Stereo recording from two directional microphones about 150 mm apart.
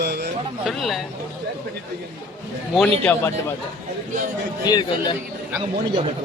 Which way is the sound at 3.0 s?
10° left (ahead or behind).